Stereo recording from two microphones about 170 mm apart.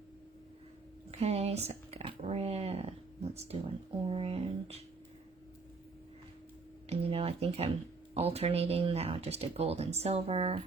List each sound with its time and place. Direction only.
1.1 s speech: 35° right (ahead or behind)
6.8 s speech: 35° right (ahead or behind)